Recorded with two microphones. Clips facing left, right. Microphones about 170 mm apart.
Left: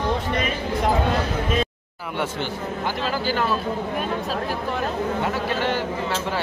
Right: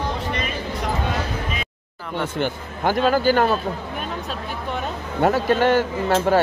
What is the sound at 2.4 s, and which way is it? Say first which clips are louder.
Speech: right 4 dB; 55° right (ahead or behind).